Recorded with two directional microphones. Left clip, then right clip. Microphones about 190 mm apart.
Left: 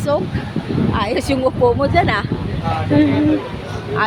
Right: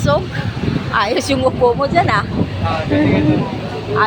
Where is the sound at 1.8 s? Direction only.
25° left (ahead or behind).